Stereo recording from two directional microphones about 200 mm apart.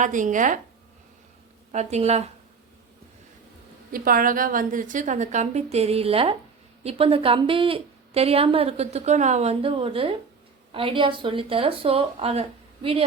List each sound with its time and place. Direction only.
0.0 s a woman's voice: 40° right (ahead or behind)
1.7 s a woman's voice: 35° right (ahead or behind)
3.9 s a woman's voice: 45° right (ahead or behind); by 13.1 s 30° right (ahead or behind)